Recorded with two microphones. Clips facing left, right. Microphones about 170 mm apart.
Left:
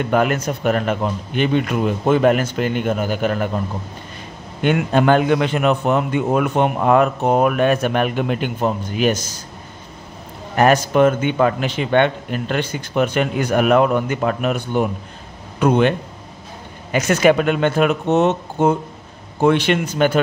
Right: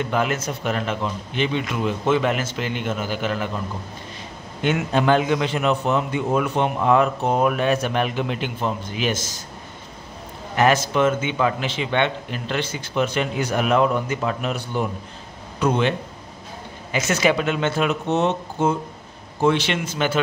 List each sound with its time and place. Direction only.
0.0 s a man's voice: 55° left (ahead or behind)
4.6 s a man's voice: 55° left (ahead or behind)
10.5 s a man's voice: 50° left (ahead or behind)
16.9 s a man's voice: 50° left (ahead or behind)